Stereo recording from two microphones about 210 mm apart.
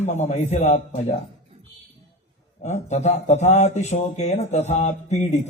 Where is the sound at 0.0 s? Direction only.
30° left (ahead or behind).